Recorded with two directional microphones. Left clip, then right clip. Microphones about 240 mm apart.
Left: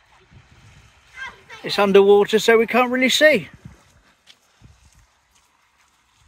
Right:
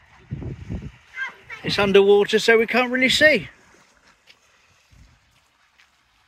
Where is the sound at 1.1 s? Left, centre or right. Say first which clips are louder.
Right 4 dB; right.